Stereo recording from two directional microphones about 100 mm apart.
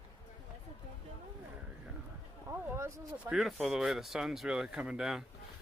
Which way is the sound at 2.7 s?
25° right (ahead or behind).